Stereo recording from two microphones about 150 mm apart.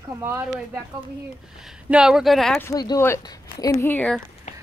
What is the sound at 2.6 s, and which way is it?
Speech, 25° left (ahead or behind).